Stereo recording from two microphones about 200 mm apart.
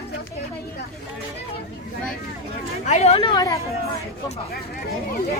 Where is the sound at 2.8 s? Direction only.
35° left (ahead or behind).